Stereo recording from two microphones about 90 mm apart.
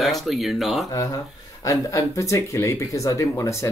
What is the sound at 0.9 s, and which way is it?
Speech, 40° left (ahead or behind).